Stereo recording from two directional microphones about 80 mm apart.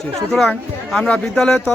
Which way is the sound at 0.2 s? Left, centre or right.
Centre.